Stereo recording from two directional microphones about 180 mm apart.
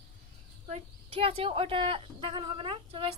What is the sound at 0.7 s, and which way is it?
Speech, 30° right (ahead or behind).